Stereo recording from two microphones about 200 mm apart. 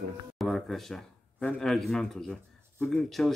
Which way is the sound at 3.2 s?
Centre (ahead or behind).